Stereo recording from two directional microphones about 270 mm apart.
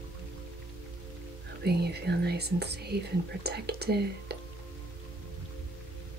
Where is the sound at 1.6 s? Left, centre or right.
Right.